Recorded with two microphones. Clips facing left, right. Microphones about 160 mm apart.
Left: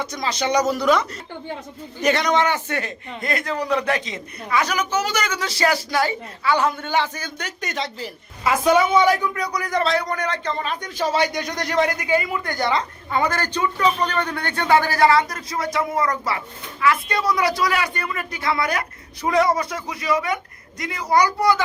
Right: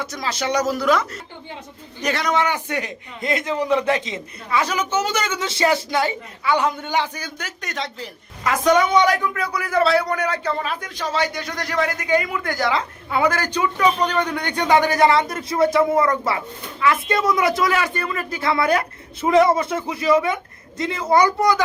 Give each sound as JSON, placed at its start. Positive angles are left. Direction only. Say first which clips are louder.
{"t": 0.0, "sound": "a man's voice", "louder": "left 1 dB", "side_deg": -5}
{"t": 11.1, "sound": "a man's voice", "louder": "even", "side_deg": 15}